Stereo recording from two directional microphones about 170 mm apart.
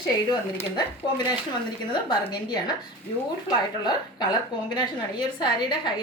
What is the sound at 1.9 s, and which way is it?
Speech, 25° left (ahead or behind).